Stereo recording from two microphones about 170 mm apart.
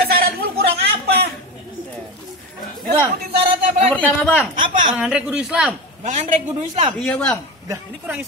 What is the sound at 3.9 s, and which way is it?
Speech, 10° left (ahead or behind).